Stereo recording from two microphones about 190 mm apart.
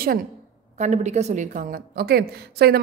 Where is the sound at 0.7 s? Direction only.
40° right (ahead or behind).